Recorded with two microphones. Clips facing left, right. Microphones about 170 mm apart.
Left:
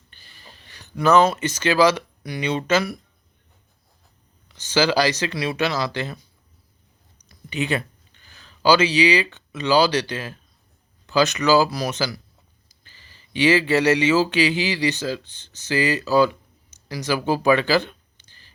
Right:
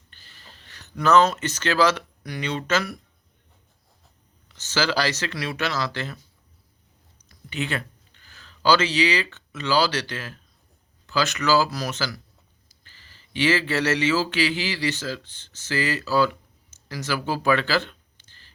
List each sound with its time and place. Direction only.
0.1 s speech: 15° left (ahead or behind)
4.4 s speech: 15° left (ahead or behind)
7.5 s speech: 15° left (ahead or behind)